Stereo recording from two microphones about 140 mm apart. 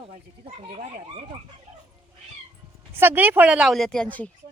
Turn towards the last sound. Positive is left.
turn(degrees=10)  # may be behind; listen again after turning